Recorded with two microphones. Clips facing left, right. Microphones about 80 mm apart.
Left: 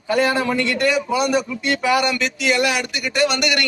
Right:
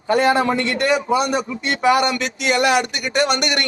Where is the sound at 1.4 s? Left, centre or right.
Right.